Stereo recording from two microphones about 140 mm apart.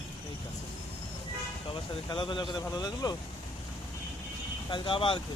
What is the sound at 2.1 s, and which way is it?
Speech, 35° left (ahead or behind).